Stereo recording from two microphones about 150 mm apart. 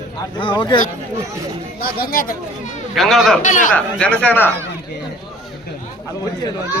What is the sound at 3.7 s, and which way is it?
Speech, 10° left (ahead or behind).